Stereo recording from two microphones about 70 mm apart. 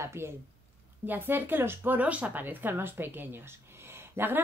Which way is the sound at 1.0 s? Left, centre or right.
Right.